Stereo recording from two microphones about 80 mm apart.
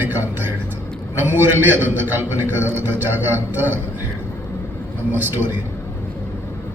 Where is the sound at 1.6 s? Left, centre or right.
Right.